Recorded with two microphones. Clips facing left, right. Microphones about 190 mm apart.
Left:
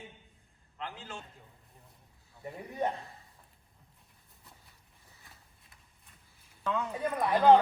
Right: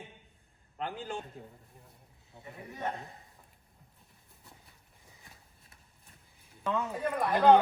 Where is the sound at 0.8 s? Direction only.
40° right (ahead or behind).